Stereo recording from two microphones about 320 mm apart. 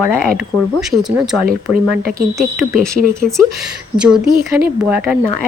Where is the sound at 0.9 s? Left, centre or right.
Centre.